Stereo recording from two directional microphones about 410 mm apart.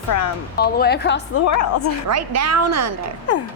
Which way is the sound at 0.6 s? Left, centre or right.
Left.